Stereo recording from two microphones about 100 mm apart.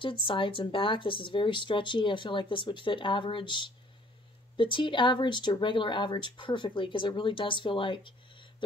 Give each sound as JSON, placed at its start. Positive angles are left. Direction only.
{"t": 0.0, "sound": "a woman's voice", "side_deg": 60}